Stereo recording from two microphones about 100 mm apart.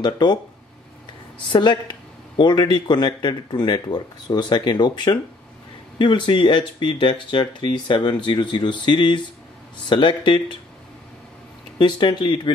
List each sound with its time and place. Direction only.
0.0 s speech: 50° left (ahead or behind)
1.5 s speech: 50° left (ahead or behind)
11.8 s speech: 50° left (ahead or behind)